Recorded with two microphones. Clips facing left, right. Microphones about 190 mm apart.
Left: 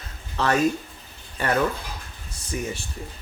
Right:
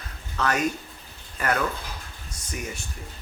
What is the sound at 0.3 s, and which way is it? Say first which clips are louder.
A man's voice: left 4 dB; 30° left (ahead or behind).